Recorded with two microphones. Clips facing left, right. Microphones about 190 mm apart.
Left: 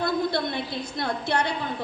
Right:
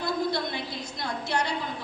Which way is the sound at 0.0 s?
60° left (ahead or behind).